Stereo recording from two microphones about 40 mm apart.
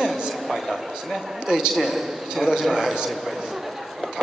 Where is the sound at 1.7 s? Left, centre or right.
Centre.